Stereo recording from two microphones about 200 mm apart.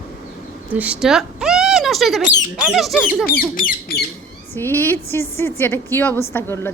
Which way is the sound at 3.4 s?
45° left (ahead or behind).